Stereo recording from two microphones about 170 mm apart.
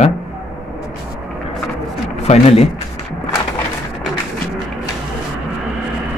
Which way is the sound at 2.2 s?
40° left (ahead or behind).